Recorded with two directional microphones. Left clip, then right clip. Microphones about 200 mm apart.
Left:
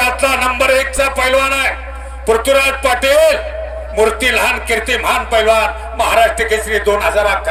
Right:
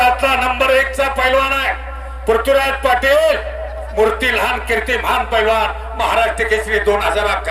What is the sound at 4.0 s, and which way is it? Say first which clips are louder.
Speech: left 2 dB; 20° left (ahead or behind).